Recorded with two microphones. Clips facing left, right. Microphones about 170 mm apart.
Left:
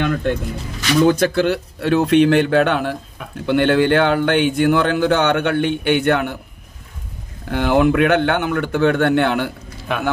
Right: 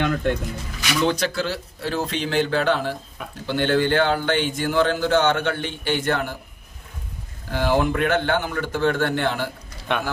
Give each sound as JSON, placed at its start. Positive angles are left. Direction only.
{"t": 0.9, "sound": "a man's voice", "side_deg": 45}
{"t": 7.5, "sound": "a man's voice", "side_deg": 65}
{"t": 9.8, "sound": "a sound", "side_deg": 0}